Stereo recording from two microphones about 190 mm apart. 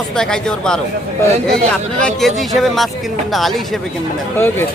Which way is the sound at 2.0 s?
Centre (ahead or behind).